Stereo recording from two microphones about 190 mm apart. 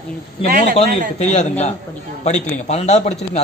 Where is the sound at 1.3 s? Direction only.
35° left (ahead or behind).